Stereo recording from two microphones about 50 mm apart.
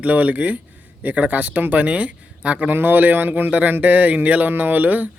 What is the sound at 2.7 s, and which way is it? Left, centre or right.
Speech, right.